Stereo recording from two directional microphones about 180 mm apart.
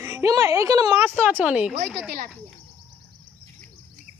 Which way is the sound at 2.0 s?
55° right (ahead or behind).